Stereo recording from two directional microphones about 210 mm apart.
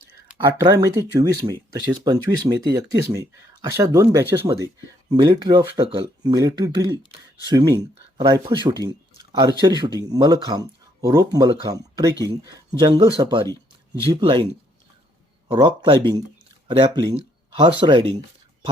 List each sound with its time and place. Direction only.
0.0 s a sound: 50° left (ahead or behind)
0.6 s speech: 15° right (ahead or behind)
8.2 s speech: 20° right (ahead or behind)
13.3 s a sound: 25° right (ahead or behind)
14.1 s speech: 25° right (ahead or behind)
15.4 s speech: 25° right (ahead or behind)